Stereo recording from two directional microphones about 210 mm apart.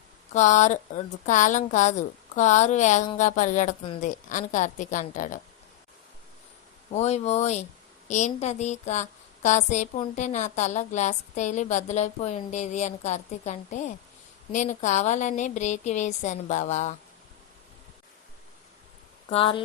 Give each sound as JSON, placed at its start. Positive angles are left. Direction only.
{"t": 0.3, "sound": "a woman's voice", "side_deg": 35}
{"t": 6.9, "sound": "a woman's voice", "side_deg": 30}
{"t": 19.3, "sound": "speech", "side_deg": 25}